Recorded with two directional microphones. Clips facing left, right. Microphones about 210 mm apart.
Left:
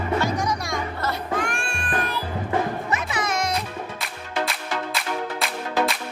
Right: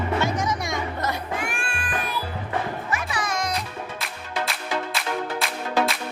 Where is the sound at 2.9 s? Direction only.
20° left (ahead or behind).